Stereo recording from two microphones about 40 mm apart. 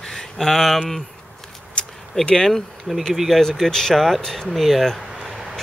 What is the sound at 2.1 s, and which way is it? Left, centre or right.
Speech, centre.